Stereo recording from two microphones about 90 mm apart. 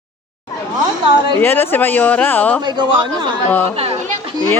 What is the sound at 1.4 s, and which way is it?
Speech, 25° left (ahead or behind).